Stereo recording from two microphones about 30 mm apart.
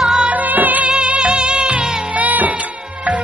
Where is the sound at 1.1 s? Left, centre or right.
Right.